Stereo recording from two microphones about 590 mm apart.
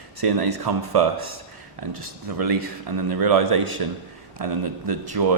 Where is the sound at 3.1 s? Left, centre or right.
Right.